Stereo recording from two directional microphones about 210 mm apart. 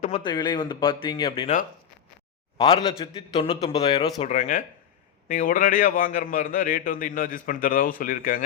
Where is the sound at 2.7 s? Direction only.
25° left (ahead or behind).